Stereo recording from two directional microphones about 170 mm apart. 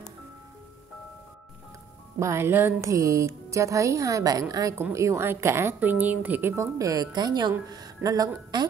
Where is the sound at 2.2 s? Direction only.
15° right (ahead or behind).